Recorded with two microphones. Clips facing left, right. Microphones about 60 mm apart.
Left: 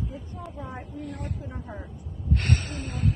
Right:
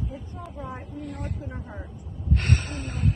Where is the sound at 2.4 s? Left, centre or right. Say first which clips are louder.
Right 1 dB; right.